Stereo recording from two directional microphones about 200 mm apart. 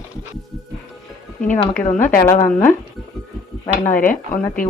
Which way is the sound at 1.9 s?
40° left (ahead or behind).